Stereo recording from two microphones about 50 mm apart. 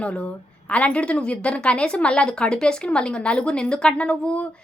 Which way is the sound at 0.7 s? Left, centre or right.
Left.